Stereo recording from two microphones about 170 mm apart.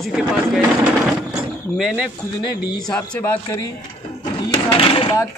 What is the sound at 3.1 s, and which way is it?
Speech, 15° left (ahead or behind).